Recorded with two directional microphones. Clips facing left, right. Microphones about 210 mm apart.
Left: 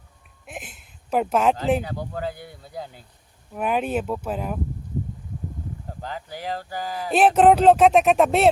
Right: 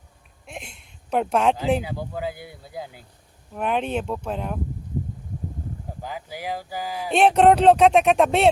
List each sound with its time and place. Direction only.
0.4 s a sound: 5° left (ahead or behind)
1.9 s speech: 10° right (ahead or behind)
3.5 s speech: 5° left (ahead or behind)
6.0 s speech: 10° right (ahead or behind)